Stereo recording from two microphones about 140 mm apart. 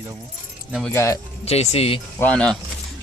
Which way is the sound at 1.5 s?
45° left (ahead or behind).